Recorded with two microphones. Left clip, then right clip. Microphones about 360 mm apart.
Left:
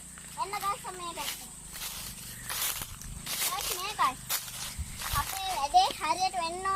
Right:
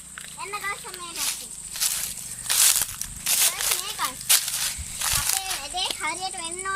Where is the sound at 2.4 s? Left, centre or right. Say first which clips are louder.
Right 13 dB; right.